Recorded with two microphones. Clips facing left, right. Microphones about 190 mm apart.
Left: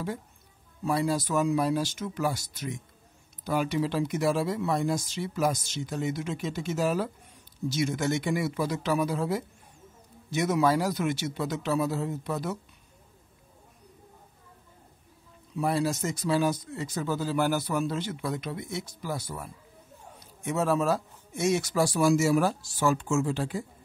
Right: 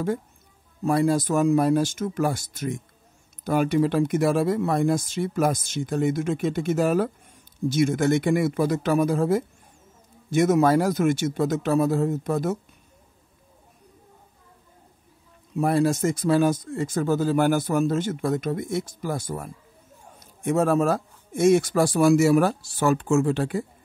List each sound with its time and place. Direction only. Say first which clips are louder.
0.8 s speech: right 6 dB; 50° right (ahead or behind)
15.5 s speech: right 6 dB; 50° right (ahead or behind)